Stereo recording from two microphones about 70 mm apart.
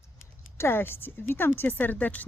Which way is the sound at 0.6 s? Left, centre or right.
Left.